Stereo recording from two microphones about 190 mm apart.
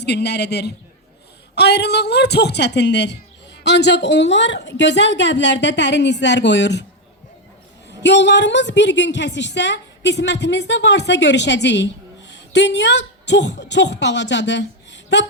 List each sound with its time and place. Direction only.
0.0 s a woman's voice: 60° left (ahead or behind)
7.9 s a woman's voice: 65° left (ahead or behind)